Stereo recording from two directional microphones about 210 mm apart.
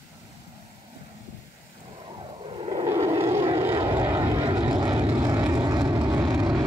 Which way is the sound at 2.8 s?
15° right (ahead or behind).